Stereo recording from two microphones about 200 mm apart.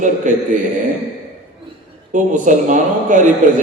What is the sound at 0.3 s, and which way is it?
Speech, 40° right (ahead or behind).